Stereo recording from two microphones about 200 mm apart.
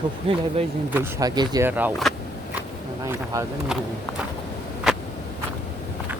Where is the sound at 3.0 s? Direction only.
15° right (ahead or behind).